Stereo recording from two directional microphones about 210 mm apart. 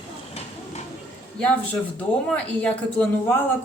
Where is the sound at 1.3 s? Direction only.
5° left (ahead or behind).